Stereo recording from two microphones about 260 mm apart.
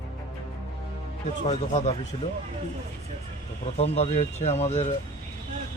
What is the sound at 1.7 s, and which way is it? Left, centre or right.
Speech, left.